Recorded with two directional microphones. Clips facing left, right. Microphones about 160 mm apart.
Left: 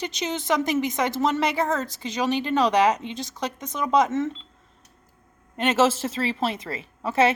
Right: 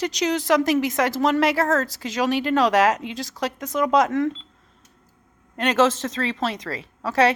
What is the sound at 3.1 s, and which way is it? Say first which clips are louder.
Speech: right 3 dB; 90° right.